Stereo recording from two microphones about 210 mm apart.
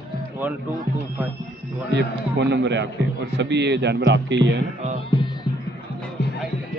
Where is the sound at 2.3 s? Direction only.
55° right (ahead or behind).